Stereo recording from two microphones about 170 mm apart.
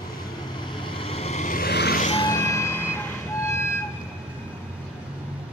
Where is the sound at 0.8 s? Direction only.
30° left (ahead or behind); by 2.0 s 70° left (ahead or behind).